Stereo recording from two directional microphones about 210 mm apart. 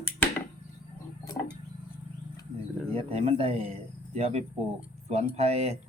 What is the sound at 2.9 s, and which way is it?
Speech, 30° right (ahead or behind).